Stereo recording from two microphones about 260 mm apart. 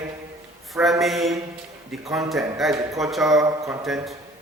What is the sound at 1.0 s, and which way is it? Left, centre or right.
A man's voice, centre.